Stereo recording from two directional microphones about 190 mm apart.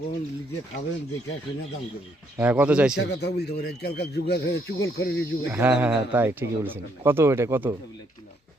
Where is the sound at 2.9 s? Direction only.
65° left (ahead or behind).